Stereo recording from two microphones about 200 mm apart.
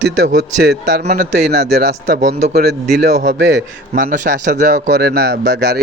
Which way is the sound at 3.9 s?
40° right (ahead or behind).